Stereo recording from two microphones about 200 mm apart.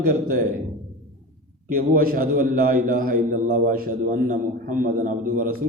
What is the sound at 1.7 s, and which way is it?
A man's voice, 45° right (ahead or behind).